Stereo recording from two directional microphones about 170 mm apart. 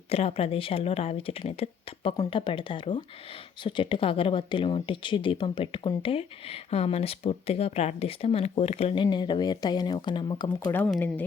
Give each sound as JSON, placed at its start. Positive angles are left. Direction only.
{"t": 0.1, "sound": "speech", "side_deg": 35}
{"t": 10.7, "sound": "speech", "side_deg": 10}